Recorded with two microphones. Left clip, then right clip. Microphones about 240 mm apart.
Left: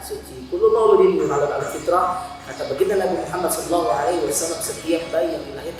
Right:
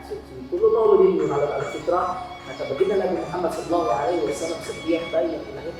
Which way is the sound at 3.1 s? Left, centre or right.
Centre.